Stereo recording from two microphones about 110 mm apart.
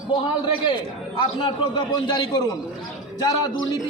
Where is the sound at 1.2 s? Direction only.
50° left (ahead or behind).